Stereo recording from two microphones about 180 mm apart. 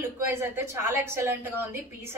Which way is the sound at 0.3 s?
15° right (ahead or behind).